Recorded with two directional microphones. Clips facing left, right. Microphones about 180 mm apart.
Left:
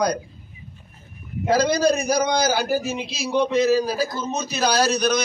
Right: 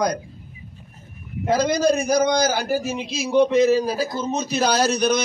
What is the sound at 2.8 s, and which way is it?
A man's voice, 15° right (ahead or behind).